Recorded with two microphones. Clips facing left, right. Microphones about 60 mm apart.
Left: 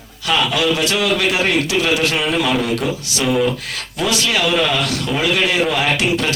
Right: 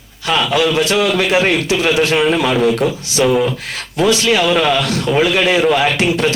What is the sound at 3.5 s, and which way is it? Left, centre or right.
Speech, right.